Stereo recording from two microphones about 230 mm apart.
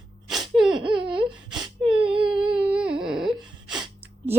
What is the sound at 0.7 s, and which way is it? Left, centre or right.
Baby cry, right.